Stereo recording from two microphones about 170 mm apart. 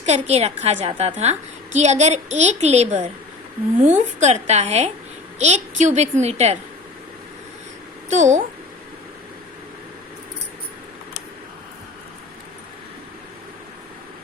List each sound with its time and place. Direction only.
0.0 s a woman's voice: 40° right (ahead or behind)
8.1 s a child's voice: 45° right (ahead or behind)